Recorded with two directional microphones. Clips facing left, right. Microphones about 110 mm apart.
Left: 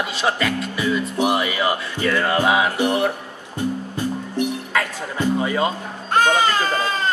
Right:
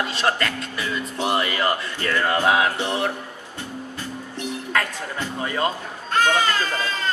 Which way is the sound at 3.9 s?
15° left (ahead or behind).